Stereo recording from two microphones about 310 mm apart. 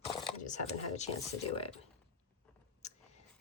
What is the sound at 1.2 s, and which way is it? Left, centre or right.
Speech, centre.